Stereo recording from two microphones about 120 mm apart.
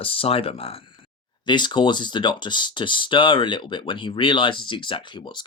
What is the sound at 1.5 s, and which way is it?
Speech, 40° left (ahead or behind).